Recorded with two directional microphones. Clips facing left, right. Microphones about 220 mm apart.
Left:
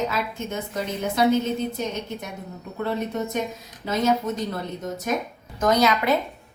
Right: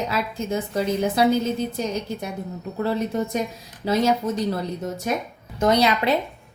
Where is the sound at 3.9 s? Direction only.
35° right (ahead or behind).